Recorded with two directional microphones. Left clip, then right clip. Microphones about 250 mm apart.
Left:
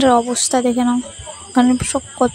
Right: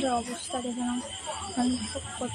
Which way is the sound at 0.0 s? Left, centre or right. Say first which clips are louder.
Left 15 dB; left.